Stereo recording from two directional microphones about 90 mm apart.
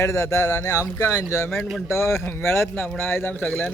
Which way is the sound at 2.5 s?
25° left (ahead or behind).